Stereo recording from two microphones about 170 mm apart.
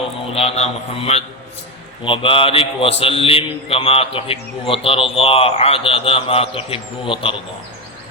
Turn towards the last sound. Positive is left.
turn(degrees=30)  # may be behind; listen again after turning